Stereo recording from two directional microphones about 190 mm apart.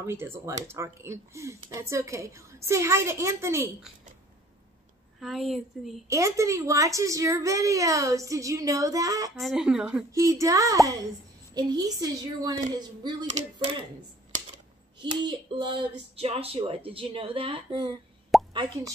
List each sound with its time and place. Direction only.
0.0 s a child's voice: 15° right (ahead or behind)
5.2 s a woman's voice: centre (ahead or behind)
6.0 s a child's voice: 15° right (ahead or behind)
9.4 s a woman's voice: centre (ahead or behind)
10.1 s a child's voice: 15° right (ahead or behind)
15.2 s speech: 25° right (ahead or behind)
18.3 s plop: centre (ahead or behind)